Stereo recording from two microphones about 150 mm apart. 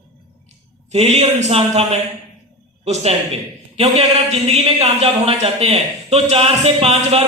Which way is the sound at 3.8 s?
45° right (ahead or behind).